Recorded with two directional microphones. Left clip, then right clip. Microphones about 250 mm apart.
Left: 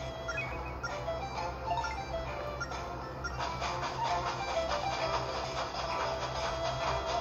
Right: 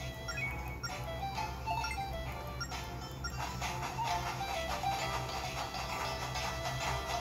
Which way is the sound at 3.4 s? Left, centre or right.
Right.